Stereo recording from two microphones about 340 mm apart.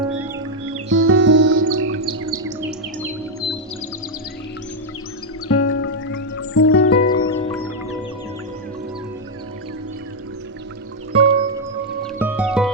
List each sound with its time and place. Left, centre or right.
0.6 s music: right
1.8 s chirp: right
5.5 s music: left
7.3 s music: centre
11.1 s music: centre
12.2 s music: centre